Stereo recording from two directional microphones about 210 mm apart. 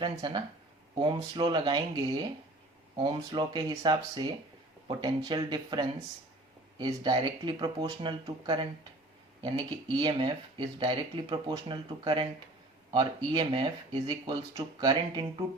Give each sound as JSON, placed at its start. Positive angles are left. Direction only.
{"t": 0.0, "sound": "speech", "side_deg": -20}